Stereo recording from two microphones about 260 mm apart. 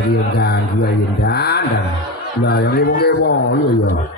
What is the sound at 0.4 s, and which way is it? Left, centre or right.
A man's voice, left.